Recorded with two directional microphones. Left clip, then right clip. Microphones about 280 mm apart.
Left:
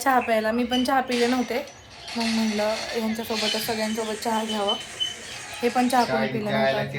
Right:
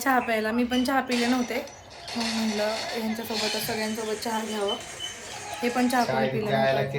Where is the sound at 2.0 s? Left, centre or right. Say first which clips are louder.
Left 3 dB; right.